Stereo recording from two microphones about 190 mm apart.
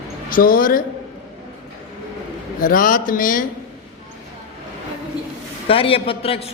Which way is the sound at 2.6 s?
45° left (ahead or behind).